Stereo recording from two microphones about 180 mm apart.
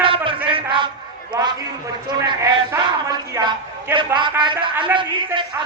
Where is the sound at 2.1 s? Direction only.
20° right (ahead or behind).